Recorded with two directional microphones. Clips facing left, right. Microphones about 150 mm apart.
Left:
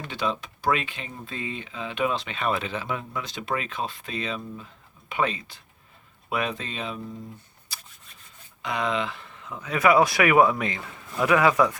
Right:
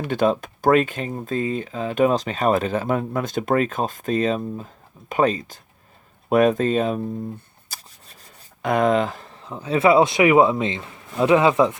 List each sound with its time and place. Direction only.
0.1 s speech: 50° right (ahead or behind)
6.2 s shuffling cards: 45° right (ahead or behind)
8.6 s speech: 50° right (ahead or behind); by 11.8 s 25° right (ahead or behind)